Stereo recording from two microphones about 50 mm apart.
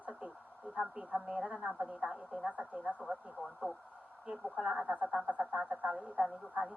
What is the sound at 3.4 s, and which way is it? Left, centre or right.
Speech, left.